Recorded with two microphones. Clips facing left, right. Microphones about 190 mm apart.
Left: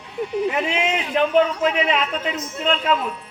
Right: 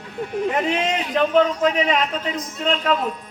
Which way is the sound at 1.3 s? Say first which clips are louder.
Right 1 dB; 40° right (ahead or behind).